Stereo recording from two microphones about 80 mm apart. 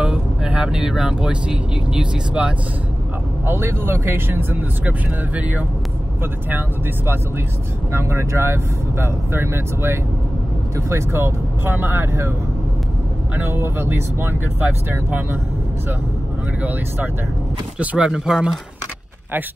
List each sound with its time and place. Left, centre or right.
0.0 s speech: centre
3.4 s speech: right
7.9 s speech: right
13.4 s speech: right
17.7 s speech: centre